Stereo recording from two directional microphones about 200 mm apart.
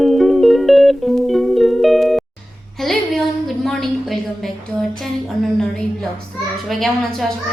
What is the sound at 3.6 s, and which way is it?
Music, centre (ahead or behind).